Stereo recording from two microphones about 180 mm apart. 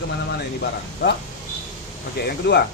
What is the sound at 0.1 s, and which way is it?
Speech, 70° left (ahead or behind).